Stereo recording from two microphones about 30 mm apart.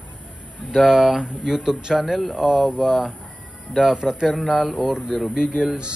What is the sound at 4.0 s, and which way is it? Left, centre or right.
Speech, right.